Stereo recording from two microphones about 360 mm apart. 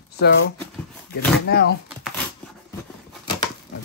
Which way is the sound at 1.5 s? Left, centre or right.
Left.